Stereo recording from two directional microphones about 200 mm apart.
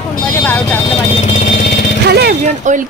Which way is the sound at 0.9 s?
35° left (ahead or behind).